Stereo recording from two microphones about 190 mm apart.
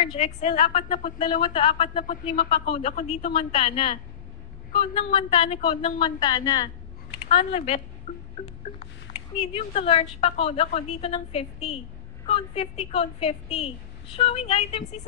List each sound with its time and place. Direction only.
0.1 s a woman's voice: 30° left (ahead or behind)
8.1 s music: 40° left (ahead or behind)
9.4 s a woman's voice: 30° left (ahead or behind)